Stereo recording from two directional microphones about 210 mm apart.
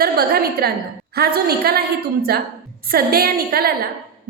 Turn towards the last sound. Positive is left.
turn(degrees=-45)  # may be behind; listen again after turning